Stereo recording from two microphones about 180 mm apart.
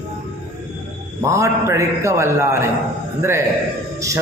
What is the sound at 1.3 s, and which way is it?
A man's voice, 15° right (ahead or behind).